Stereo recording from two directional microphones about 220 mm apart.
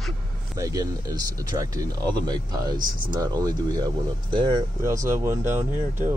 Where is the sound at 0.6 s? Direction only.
15° right (ahead or behind).